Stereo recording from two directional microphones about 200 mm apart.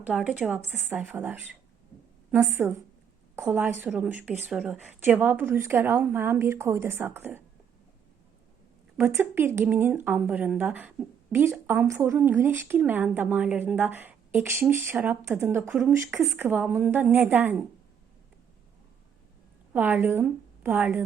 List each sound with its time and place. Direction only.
0.1 s a woman's voice: 5° right (ahead or behind)
9.0 s a woman's voice: 10° right (ahead or behind)
19.7 s a woman's voice: 10° right (ahead or behind)